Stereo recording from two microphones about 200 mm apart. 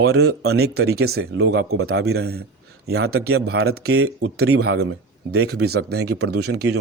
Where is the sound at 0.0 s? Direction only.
90° right.